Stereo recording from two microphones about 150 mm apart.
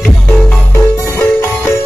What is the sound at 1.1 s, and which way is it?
Music, 15° left (ahead or behind).